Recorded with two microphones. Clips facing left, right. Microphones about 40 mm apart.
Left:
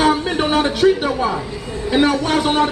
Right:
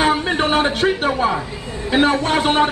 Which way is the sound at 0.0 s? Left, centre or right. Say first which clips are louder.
Left 1 dB; centre.